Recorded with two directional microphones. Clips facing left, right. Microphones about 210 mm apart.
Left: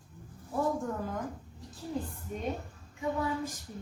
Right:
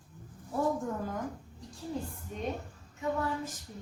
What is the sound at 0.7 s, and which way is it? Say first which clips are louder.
Speech: even; centre (ahead or behind).